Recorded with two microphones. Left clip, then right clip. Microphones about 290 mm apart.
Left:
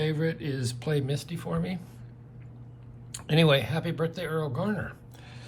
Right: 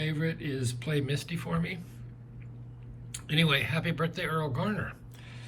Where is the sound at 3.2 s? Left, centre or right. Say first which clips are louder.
Left 4 dB; centre.